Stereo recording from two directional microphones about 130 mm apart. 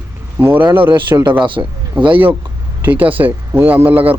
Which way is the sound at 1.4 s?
40° right (ahead or behind).